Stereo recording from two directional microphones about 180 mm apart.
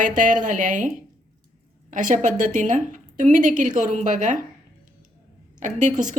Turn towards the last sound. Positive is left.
turn(degrees=-45)  # may be behind; listen again after turning